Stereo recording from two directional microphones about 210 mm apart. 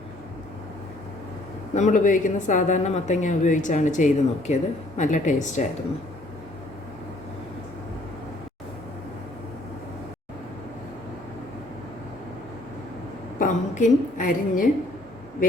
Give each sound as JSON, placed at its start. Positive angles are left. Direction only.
{"t": 1.7, "sound": "speech", "side_deg": 35}
{"t": 13.4, "sound": "a woman's voice", "side_deg": 35}